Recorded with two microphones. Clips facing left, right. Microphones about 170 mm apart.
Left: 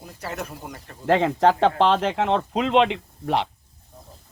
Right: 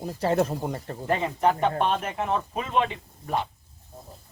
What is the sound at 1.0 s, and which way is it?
Speech, 90° left.